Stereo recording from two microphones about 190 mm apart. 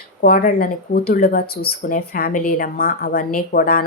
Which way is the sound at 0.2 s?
50° left (ahead or behind).